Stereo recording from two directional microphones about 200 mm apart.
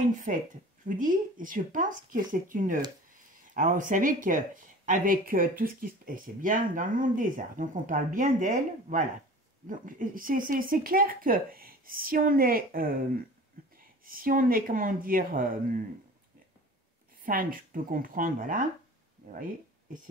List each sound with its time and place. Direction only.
0.1 s speech: 40° right (ahead or behind)
17.2 s speech: 45° right (ahead or behind)